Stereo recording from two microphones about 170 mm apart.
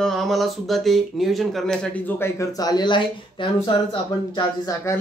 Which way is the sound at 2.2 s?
20° left (ahead or behind).